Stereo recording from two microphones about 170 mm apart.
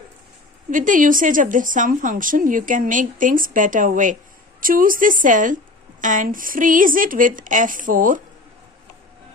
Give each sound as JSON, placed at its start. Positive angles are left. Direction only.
{"t": 0.7, "sound": "speech", "side_deg": -50}